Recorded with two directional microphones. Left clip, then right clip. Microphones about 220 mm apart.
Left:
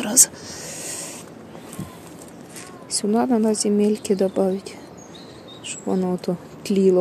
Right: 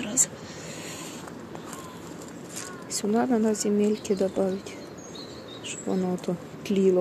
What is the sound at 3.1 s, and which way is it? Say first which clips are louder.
Speech: left 4 dB; 20° left (ahead or behind).